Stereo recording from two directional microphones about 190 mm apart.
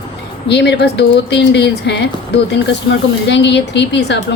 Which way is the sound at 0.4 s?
65° left (ahead or behind).